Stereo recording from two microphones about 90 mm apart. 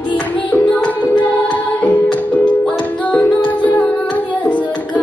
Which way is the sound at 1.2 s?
15° left (ahead or behind).